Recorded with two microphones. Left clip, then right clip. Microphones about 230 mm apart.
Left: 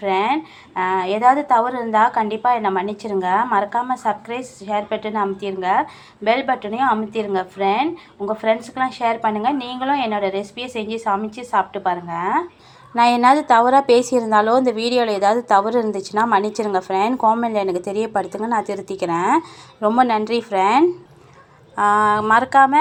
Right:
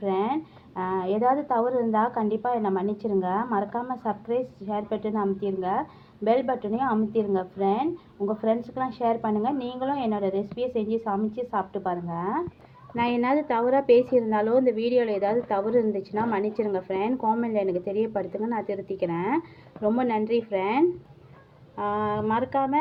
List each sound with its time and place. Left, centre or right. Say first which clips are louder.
0.0 s a woman's voice: left 8 dB; centre